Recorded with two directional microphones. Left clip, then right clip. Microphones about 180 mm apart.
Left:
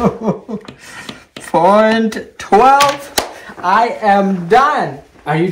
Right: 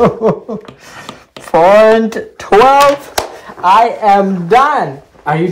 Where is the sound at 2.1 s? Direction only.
35° right (ahead or behind); by 5.4 s 15° right (ahead or behind).